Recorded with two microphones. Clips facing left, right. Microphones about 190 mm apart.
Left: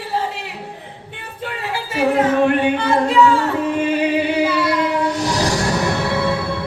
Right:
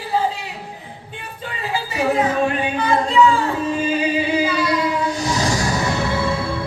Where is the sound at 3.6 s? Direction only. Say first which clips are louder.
Left 2 dB; 65° left (ahead or behind).